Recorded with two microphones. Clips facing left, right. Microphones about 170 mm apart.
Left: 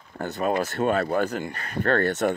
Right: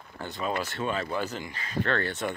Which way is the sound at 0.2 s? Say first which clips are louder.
Left 6 dB; 45° left (ahead or behind).